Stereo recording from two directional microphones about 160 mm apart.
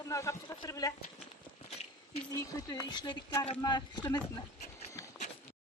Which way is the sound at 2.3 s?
20° left (ahead or behind).